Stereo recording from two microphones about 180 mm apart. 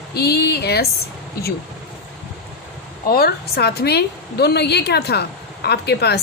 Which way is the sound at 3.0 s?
55° left (ahead or behind).